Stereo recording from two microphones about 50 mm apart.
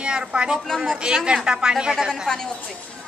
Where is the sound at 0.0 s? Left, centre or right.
Centre.